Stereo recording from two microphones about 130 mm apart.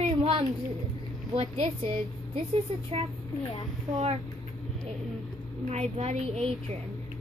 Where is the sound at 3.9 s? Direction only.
55° right (ahead or behind).